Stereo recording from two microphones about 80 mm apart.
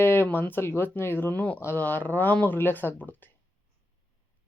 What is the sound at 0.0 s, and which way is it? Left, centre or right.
Speech, left.